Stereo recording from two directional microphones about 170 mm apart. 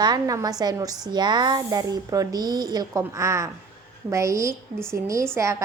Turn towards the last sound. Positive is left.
turn(degrees=-15)  # may be behind; listen again after turning